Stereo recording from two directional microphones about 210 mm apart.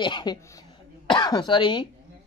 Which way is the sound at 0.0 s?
20° left (ahead or behind).